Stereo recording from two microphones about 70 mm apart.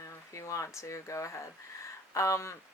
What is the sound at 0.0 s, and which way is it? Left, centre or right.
Speech, left.